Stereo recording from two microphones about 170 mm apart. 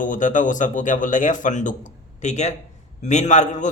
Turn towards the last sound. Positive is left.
turn(degrees=45)  # may be behind; listen again after turning